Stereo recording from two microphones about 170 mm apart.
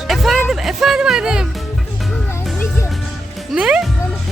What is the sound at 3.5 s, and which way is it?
Speech, 5° right (ahead or behind).